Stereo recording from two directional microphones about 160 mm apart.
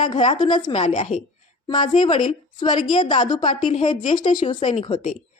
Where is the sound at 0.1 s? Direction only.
30° left (ahead or behind).